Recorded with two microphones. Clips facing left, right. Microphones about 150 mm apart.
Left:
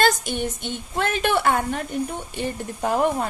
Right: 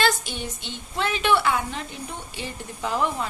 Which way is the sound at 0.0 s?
45° left (ahead or behind).